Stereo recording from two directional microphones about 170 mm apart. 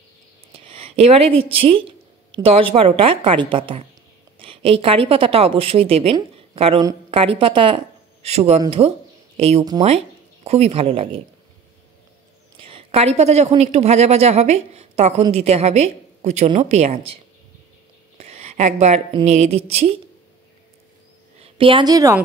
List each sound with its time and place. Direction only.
0.5 s a woman's voice: 35° right (ahead or behind)
12.5 s a woman's voice: 30° right (ahead or behind)
18.1 s a sound: 40° right (ahead or behind)
19.2 s a woman's voice: 40° right (ahead or behind)
21.4 s a woman's voice: 30° right (ahead or behind)